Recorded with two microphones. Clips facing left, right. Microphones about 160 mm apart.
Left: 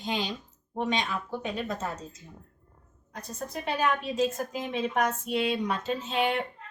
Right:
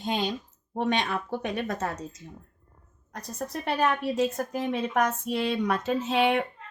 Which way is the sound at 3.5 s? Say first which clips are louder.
Right 2 dB; 65° right (ahead or behind).